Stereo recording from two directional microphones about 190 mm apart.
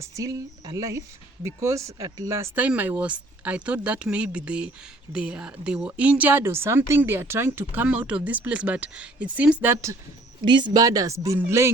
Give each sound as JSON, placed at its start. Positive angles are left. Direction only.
{"t": 0.0, "sound": "speech", "side_deg": -15}